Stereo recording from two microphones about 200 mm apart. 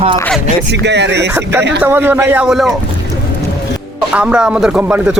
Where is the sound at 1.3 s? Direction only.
10° right (ahead or behind).